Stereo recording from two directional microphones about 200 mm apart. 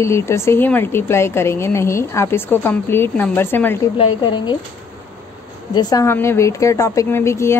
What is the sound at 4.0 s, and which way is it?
Speech, 25° left (ahead or behind).